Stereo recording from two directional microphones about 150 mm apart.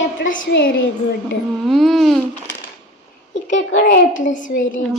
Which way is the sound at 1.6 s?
Centre (ahead or behind).